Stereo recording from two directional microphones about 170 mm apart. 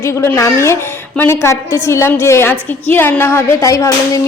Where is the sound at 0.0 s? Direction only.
15° left (ahead or behind).